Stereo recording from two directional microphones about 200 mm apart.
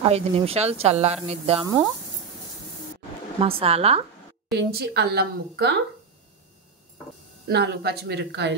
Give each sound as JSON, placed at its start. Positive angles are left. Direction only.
{"t": 0.0, "sound": "speech", "side_deg": -30}
{"t": 3.3, "sound": "speech", "side_deg": -30}
{"t": 4.6, "sound": "a woman's voice", "side_deg": -55}
{"t": 7.4, "sound": "a woman's voice", "side_deg": -55}